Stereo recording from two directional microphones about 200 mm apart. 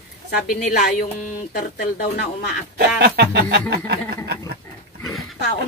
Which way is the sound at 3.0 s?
50° right (ahead or behind).